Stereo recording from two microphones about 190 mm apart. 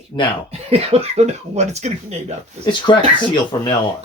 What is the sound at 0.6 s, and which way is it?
Speech, 35° right (ahead or behind).